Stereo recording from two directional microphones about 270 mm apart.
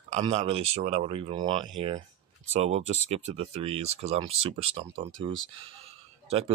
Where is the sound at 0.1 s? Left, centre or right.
Right.